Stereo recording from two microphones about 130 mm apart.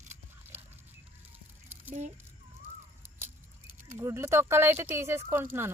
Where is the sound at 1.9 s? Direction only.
65° right (ahead or behind).